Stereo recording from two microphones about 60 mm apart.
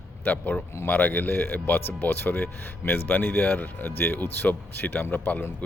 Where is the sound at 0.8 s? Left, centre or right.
Left.